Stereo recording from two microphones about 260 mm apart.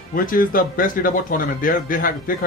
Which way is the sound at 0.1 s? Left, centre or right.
Left.